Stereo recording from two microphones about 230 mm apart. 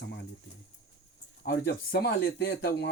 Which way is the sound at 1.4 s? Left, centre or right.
Left.